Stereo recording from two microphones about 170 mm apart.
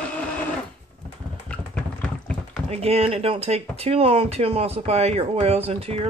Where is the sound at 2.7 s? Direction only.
35° right (ahead or behind).